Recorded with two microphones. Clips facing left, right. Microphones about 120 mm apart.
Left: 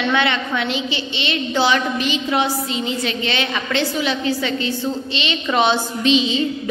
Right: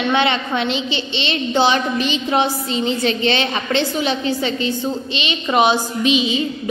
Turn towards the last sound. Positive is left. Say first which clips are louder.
# even
turn(degrees=-10)  # may be behind; listen again after turning